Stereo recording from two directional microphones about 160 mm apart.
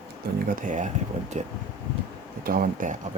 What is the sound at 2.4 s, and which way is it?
Speech, 55° right (ahead or behind).